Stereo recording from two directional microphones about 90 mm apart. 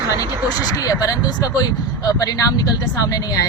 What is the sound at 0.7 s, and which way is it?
Speech, 40° left (ahead or behind).